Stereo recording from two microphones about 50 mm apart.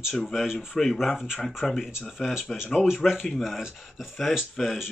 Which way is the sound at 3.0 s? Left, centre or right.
Centre.